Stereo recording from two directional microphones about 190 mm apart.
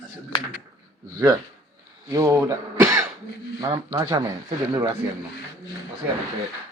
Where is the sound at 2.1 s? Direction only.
15° right (ahead or behind).